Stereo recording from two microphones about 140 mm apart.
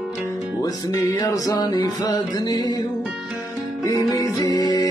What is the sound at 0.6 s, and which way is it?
Music, 25° left (ahead or behind).